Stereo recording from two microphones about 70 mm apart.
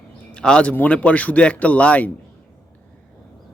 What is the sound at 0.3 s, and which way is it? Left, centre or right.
A man's voice, centre.